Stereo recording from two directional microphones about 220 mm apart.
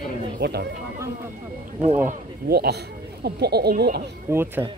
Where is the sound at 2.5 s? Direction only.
45° right (ahead or behind).